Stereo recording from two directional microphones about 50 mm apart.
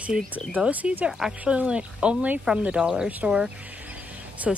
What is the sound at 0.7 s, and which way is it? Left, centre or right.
Speech, right.